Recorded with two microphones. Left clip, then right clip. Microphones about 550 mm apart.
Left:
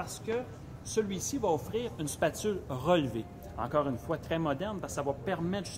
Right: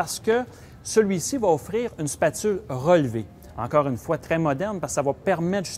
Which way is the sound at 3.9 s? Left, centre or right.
Right.